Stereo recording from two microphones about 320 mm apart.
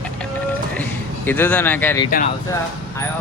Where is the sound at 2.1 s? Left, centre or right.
Left.